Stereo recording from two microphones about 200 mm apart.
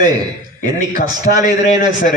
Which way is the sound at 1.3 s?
45° left (ahead or behind).